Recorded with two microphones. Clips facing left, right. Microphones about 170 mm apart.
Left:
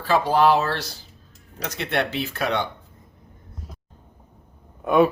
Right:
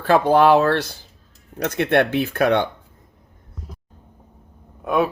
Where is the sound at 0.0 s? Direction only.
55° right (ahead or behind).